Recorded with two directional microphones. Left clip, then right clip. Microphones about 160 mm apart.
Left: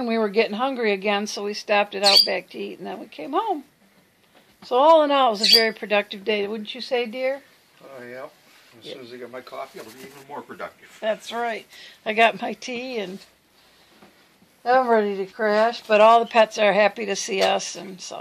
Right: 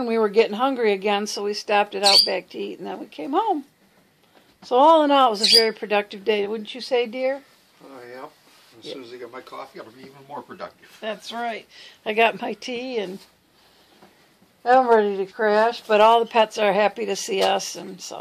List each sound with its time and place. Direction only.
0.0 s speech: 15° right (ahead or behind)
4.6 s speech: 20° right (ahead or behind)
11.2 s speech: 30° left (ahead or behind)
11.7 s speech: 5° left (ahead or behind)
12.0 s speech: 10° right (ahead or behind)
14.6 s speech: 20° right (ahead or behind)